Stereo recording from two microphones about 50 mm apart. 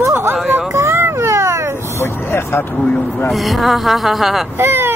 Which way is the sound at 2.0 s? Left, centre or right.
Left.